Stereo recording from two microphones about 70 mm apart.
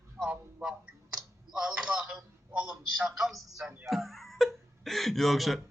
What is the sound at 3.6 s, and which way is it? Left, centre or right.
Speech, right.